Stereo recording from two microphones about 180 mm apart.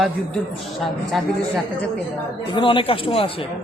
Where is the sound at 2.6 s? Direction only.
30° left (ahead or behind).